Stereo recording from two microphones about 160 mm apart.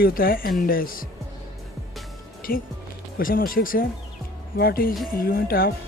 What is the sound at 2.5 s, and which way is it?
Speech, 65° left (ahead or behind).